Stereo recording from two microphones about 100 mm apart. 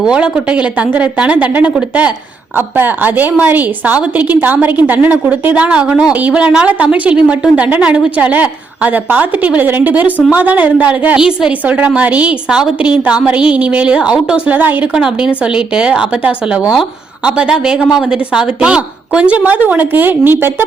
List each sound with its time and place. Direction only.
0.0 s a woman's voice: 10° right (ahead or behind)